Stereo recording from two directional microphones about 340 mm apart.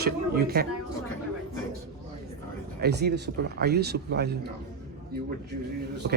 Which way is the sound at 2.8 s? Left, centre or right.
Right.